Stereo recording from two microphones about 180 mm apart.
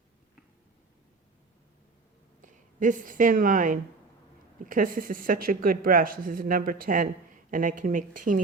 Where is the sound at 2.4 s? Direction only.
45° right (ahead or behind).